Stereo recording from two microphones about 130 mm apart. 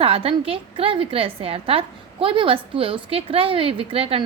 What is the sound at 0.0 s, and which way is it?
A woman's voice, 45° right (ahead or behind).